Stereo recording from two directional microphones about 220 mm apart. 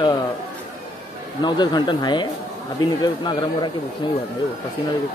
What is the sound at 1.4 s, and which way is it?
Speech, 20° left (ahead or behind).